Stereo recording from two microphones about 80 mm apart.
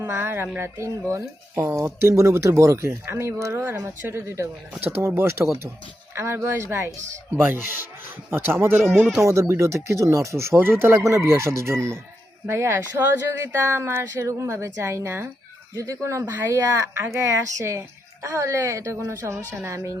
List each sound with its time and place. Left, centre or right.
0.0 s speech: right
1.5 s a woman's voice: right
9.2 s speech: right
16.2 s a woman's voice: right
16.5 s speech: right